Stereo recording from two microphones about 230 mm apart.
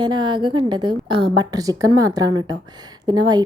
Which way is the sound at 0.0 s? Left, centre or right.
Centre.